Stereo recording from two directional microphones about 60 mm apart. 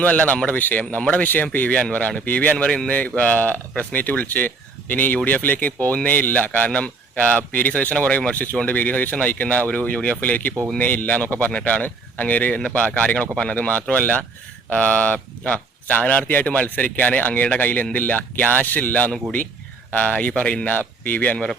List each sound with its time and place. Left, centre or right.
0.0 s speech: left